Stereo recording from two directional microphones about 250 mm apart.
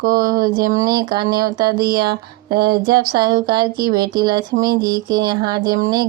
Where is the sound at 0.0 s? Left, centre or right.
Right.